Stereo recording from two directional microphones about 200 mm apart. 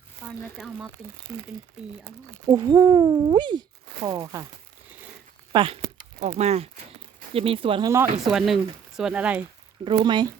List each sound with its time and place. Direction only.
0.3 s speech: centre (ahead or behind)
2.5 s speech: 20° right (ahead or behind)
5.5 s speech: 25° right (ahead or behind)
8.2 s speech: centre (ahead or behind)
9.8 s speech: 25° right (ahead or behind)